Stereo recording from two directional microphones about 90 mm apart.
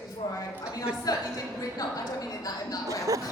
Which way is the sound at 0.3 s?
40° left (ahead or behind).